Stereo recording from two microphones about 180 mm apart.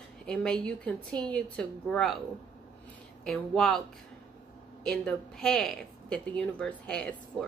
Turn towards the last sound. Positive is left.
turn(degrees=5)  # may be behind; listen again after turning